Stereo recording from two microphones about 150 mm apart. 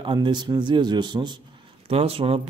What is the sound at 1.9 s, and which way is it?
Speech, 40° right (ahead or behind).